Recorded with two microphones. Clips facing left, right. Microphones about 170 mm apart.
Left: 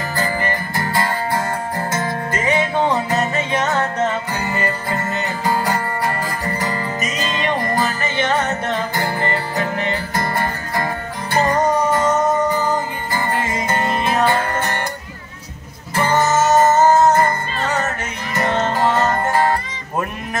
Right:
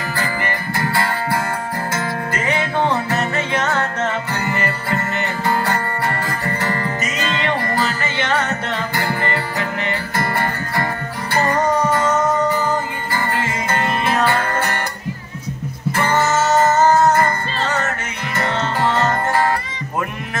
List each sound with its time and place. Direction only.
0.7 s music: 20° left (ahead or behind)
15.9 s music: 15° left (ahead or behind)